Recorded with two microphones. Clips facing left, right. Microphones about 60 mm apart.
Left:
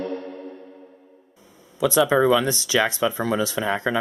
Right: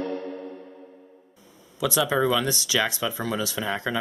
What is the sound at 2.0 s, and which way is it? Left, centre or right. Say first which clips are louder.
Speech: left 5 dB; centre.